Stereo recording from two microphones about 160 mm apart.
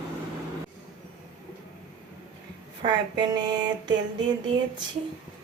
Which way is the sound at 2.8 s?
25° right (ahead or behind).